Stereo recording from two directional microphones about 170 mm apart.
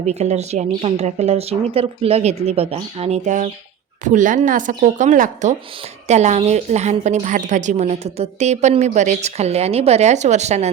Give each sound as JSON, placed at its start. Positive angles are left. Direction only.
{"t": 0.0, "sound": "a woman's voice", "side_deg": -40}